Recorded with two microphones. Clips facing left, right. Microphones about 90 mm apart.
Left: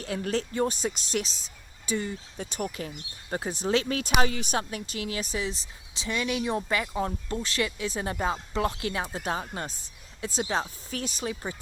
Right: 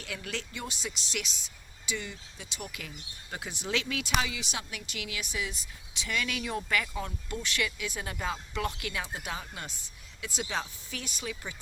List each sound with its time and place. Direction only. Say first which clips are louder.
0.0 s speech: left 9 dB; 35° left (ahead or behind)